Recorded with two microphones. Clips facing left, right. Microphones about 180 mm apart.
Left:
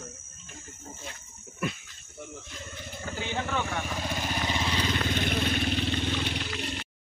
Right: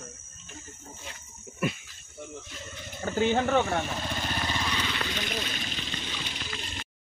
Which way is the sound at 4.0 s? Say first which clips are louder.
Left 1 dB; 10° left (ahead or behind).